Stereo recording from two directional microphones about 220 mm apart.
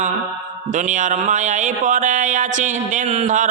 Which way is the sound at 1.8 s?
35° right (ahead or behind).